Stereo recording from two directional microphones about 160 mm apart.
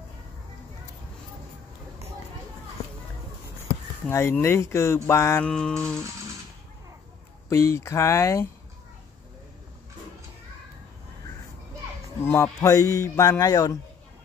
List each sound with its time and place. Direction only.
4.1 s speech: 15° left (ahead or behind)
5.5 s speech: 5° left (ahead or behind)
7.4 s speech: 15° left (ahead or behind)
12.2 s speech: 15° left (ahead or behind)